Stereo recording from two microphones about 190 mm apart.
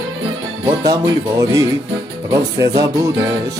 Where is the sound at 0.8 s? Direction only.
20° right (ahead or behind).